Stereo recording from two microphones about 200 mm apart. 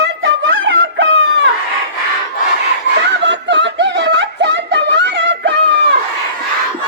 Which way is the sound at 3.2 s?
65° right (ahead or behind).